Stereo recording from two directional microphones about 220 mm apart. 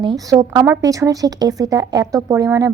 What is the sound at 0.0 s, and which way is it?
A woman's voice, 20° right (ahead or behind).